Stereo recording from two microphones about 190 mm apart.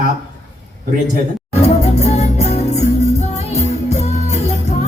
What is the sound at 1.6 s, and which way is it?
Music, 35° left (ahead or behind).